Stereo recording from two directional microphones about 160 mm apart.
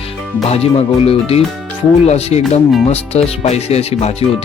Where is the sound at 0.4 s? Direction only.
40° left (ahead or behind).